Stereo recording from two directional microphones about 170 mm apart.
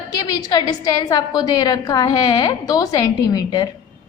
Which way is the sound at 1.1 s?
20° left (ahead or behind).